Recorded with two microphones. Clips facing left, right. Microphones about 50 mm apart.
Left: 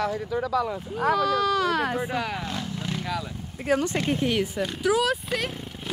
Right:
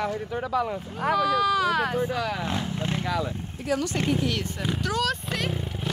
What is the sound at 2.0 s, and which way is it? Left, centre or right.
Speech, centre.